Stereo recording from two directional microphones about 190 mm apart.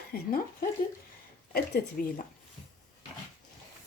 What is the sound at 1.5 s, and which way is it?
Speech, 55° left (ahead or behind).